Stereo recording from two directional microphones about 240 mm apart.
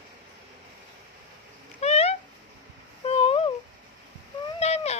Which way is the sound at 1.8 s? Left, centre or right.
Left.